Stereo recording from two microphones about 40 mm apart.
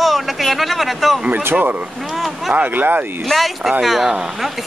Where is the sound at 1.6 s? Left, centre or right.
Right.